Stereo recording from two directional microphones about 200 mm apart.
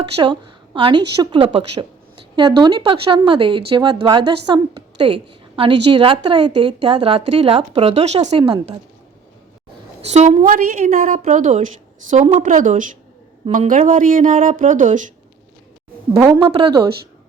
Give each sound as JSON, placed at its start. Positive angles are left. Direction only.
{"t": 0.2, "sound": "a woman's voice", "side_deg": -25}
{"t": 1.5, "sound": "a sound", "side_deg": -25}
{"t": 2.6, "sound": "a woman's voice", "side_deg": -25}
{"t": 10.0, "sound": "speech", "side_deg": -35}
{"t": 16.1, "sound": "a woman's voice", "side_deg": -15}
{"t": 16.5, "sound": "a woman's voice", "side_deg": -25}